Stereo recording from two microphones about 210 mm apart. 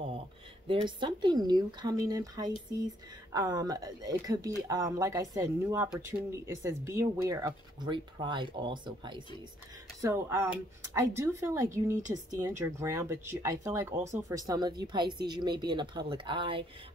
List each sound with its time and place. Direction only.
0.7 s speech: 25° right (ahead or behind)